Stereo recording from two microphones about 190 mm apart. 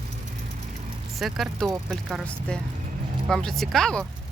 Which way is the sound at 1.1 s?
Centre (ahead or behind).